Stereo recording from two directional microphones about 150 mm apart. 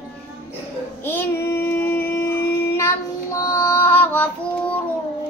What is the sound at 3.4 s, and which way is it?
Female singing, 20° left (ahead or behind).